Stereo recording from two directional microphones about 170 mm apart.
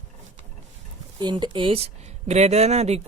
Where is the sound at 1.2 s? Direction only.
25° right (ahead or behind).